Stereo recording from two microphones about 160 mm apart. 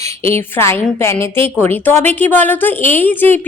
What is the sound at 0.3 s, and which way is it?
A woman's voice, 15° left (ahead or behind).